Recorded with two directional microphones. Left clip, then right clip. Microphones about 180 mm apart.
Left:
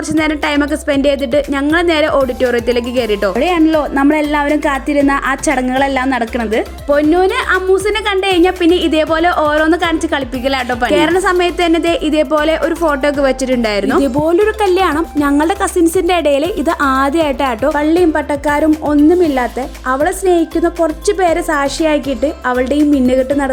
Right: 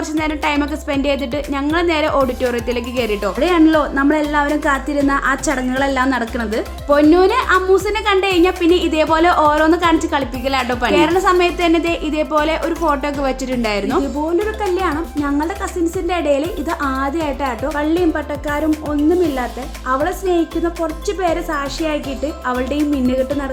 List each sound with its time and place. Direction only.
0.2 s a woman's voice: 30° left (ahead or behind)
14.0 s a woman's voice: 60° left (ahead or behind); by 22.8 s 40° left (ahead or behind)